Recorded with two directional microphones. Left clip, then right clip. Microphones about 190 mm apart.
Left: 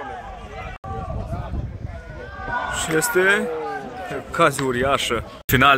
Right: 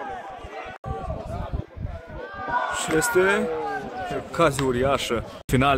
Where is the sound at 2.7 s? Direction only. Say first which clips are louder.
Left 3 dB; centre (ahead or behind).